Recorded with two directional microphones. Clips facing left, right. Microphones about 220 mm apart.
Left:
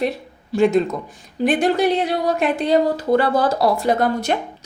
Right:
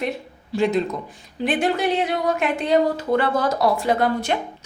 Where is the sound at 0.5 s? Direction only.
50° left (ahead or behind).